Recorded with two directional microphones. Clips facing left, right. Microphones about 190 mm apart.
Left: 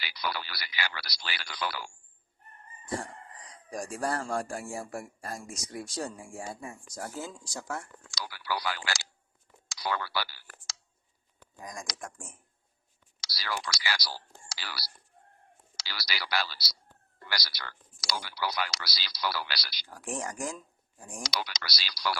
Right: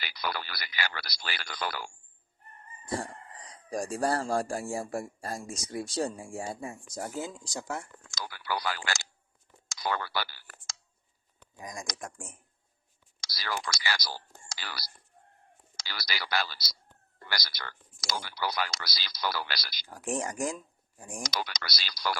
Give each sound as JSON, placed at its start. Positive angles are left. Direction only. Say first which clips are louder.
{"t": 0.0, "sound": "speech", "louder": "even", "side_deg": -50}
{"t": 3.7, "sound": "a man's voice", "louder": "right 3 dB", "side_deg": -30}
{"t": 8.6, "sound": "speech", "louder": "right 1 dB", "side_deg": -45}
{"t": 9.7, "sound": "a sound", "louder": "right 1 dB", "side_deg": -50}
{"t": 11.5, "sound": "speech", "louder": "right 1 dB", "side_deg": -15}
{"t": 13.2, "sound": "speech", "louder": "right 1 dB", "side_deg": -50}
{"t": 19.9, "sound": "a man's voice", "louder": "right 3 dB", "side_deg": -20}
{"t": 21.2, "sound": "speech", "louder": "even", "side_deg": -50}